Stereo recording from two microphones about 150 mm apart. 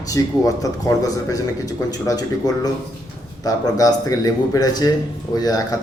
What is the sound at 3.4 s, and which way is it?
A man's voice, 25° left (ahead or behind).